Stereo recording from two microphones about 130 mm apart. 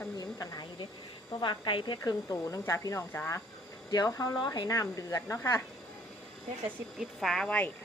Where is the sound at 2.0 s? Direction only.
25° left (ahead or behind).